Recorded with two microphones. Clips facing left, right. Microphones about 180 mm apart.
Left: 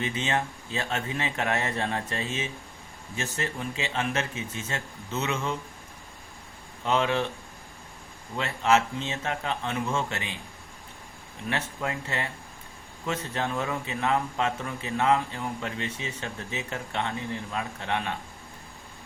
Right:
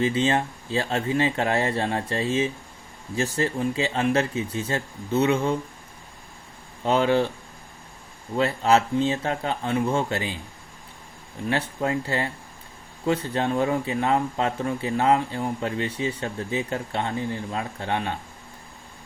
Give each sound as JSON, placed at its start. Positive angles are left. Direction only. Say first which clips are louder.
{"t": 0.0, "sound": "speech", "louder": "right 7 dB", "side_deg": -30}
{"t": 6.8, "sound": "speech", "louder": "right 5 dB", "side_deg": -35}
{"t": 8.4, "sound": "speech", "louder": "right 4 dB", "side_deg": -35}
{"t": 11.4, "sound": "speech", "louder": "right 6 dB", "side_deg": -30}